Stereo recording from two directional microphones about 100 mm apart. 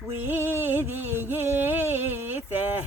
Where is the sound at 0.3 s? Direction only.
20° right (ahead or behind).